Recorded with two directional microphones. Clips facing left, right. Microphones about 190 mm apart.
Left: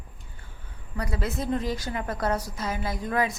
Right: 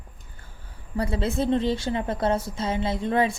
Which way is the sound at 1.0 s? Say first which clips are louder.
Right 5 dB; 25° right (ahead or behind).